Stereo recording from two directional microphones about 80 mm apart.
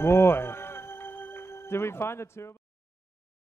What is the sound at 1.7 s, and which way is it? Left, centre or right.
Speech, left.